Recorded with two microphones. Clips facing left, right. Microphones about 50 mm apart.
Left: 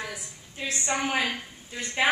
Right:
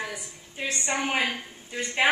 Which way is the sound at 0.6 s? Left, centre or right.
Centre.